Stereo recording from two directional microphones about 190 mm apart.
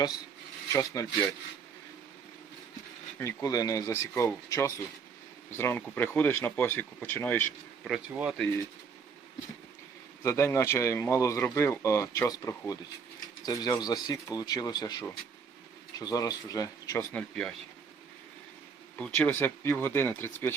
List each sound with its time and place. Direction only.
0.7 s speech: 15° left (ahead or behind)
3.2 s speech: 15° left (ahead or behind)
7.9 s a man's voice: 5° right (ahead or behind)
10.2 s speech: 15° left (ahead or behind)
17.2 s a man's voice: 5° left (ahead or behind)
19.1 s speech: 10° left (ahead or behind)